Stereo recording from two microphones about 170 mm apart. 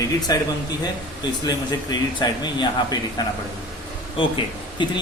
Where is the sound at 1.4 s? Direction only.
25° left (ahead or behind).